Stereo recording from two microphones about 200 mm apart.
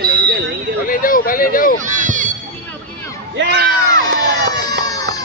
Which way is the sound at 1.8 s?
40° right (ahead or behind).